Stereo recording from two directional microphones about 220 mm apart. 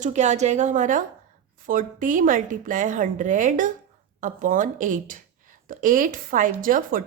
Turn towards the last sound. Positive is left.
turn(degrees=-40)  # may be behind; listen again after turning